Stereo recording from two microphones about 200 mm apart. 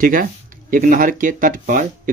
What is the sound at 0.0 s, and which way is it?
Speech, 45° right (ahead or behind).